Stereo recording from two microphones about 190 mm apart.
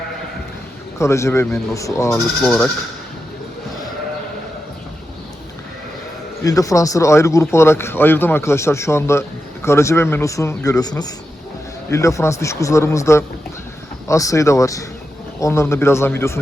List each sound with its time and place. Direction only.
0.9 s speech: 15° left (ahead or behind)
2.4 s speech: 5° left (ahead or behind)
6.4 s speech: 15° left (ahead or behind)